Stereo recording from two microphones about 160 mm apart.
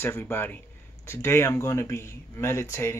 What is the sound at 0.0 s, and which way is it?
Speech, 15° left (ahead or behind).